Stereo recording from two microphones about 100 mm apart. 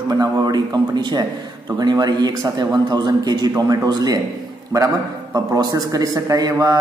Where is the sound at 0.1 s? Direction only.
40° right (ahead or behind).